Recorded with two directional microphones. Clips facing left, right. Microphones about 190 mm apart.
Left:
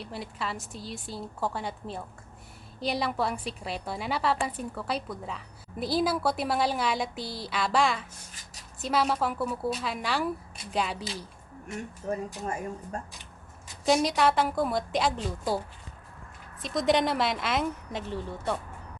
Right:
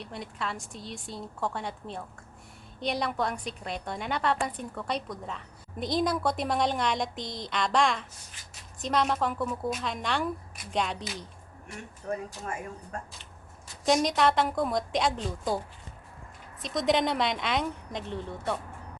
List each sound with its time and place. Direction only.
0.0 s a woman's voice: centre (ahead or behind)
12.0 s speech: 25° left (ahead or behind)
13.8 s a woman's voice: 5° left (ahead or behind)
16.6 s a woman's voice: centre (ahead or behind)